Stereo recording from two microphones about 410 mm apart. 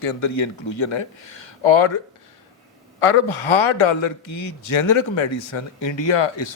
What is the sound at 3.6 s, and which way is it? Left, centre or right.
Speech, left.